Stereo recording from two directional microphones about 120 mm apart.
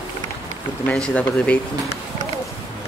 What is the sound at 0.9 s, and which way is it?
Speech, 10° left (ahead or behind).